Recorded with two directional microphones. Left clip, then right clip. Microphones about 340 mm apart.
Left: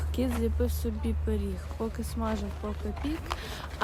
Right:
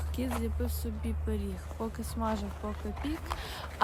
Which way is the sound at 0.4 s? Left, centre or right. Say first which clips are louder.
Left 6 dB; centre.